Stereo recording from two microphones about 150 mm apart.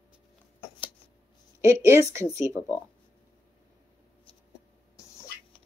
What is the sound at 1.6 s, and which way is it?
Speech, 15° right (ahead or behind).